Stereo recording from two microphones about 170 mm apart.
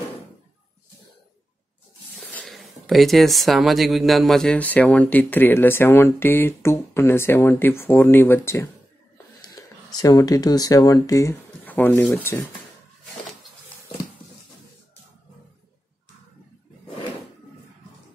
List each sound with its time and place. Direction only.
2.1 s speech: centre (ahead or behind)